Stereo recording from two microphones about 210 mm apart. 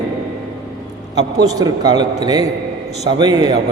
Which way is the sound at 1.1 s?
20° right (ahead or behind).